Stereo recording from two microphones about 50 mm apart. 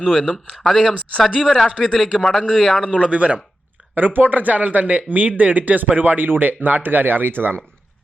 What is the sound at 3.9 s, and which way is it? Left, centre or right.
Speech, right.